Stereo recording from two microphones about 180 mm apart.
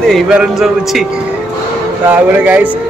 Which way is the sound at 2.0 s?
10° right (ahead or behind).